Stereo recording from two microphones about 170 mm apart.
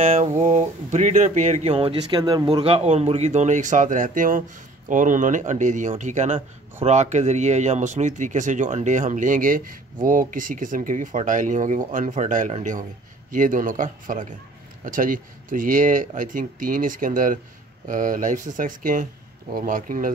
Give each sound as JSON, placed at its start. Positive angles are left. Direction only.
{"t": 0.0, "sound": "speech", "side_deg": -40}